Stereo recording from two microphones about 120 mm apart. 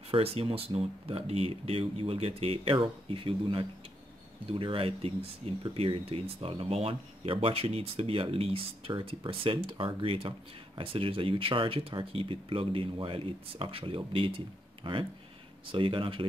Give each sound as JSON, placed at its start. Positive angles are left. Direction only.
{"t": 0.1, "sound": "speech", "side_deg": -55}